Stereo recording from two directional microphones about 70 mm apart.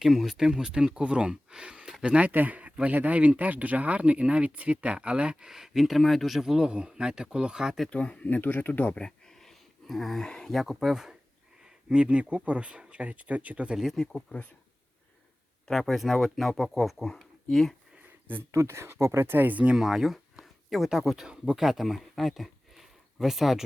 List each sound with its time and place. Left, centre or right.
0.0 s speech: centre
7.9 s speech: centre
8.4 s speech: left; by 13.7 s centre
13.7 s speech: centre
15.6 s speech: centre
18.5 s speech: right
19.7 s speech: centre